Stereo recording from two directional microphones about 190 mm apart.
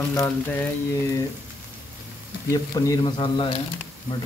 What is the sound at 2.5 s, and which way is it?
Speech, 15° left (ahead or behind).